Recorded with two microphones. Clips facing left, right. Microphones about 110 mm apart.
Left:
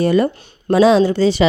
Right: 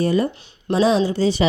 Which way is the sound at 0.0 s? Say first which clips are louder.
Left 4 dB; 70° left (ahead or behind).